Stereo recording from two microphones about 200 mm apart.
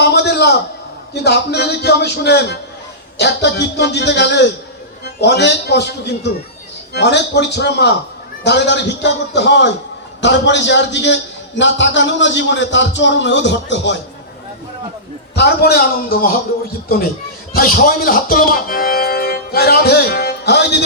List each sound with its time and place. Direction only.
0.0 s a sound: 55° left (ahead or behind)
1.1 s a man's voice: 55° left (ahead or behind)
15.4 s a man's voice: 55° left (ahead or behind)
17.5 s speech: 45° left (ahead or behind)